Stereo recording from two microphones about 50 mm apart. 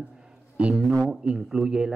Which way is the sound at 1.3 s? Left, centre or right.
Centre.